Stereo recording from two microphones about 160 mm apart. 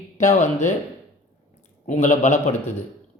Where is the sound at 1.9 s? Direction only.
50° left (ahead or behind).